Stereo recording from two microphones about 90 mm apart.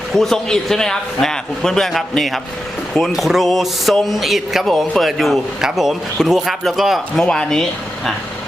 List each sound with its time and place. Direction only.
0.1 s speech: 5° left (ahead or behind)